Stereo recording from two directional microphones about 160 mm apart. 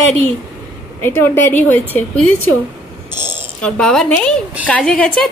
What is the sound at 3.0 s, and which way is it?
Speech, 15° right (ahead or behind).